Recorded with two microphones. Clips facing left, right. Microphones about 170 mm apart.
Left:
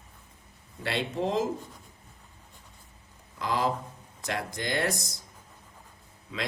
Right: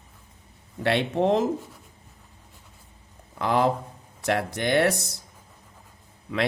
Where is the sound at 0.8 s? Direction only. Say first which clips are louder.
Right 7 dB; 65° right (ahead or behind).